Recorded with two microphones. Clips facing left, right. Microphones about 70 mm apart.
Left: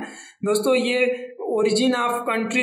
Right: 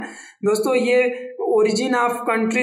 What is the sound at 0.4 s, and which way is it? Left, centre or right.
A man's voice, right.